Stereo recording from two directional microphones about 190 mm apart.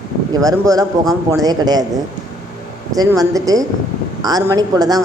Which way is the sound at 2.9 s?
20° right (ahead or behind).